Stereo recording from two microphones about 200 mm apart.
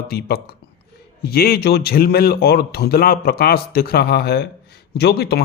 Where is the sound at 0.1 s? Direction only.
50° left (ahead or behind).